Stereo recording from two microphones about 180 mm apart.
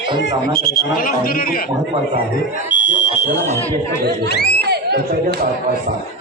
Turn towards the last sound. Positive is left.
turn(degrees=65)  # may be behind; listen again after turning